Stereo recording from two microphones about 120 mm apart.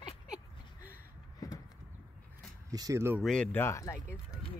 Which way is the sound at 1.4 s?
30° left (ahead or behind).